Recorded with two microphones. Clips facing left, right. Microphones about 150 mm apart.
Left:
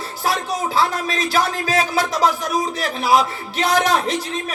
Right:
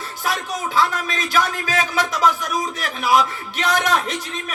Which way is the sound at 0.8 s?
35° left (ahead or behind).